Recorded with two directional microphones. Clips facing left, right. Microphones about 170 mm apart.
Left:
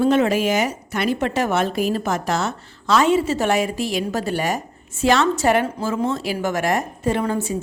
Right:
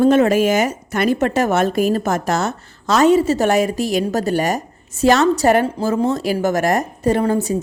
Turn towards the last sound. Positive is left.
turn(degrees=-35)  # may be behind; listen again after turning